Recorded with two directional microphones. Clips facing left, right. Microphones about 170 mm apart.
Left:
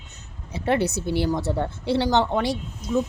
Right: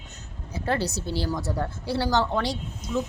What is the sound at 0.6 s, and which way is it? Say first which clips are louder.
Speech: left 5 dB; 20° left (ahead or behind).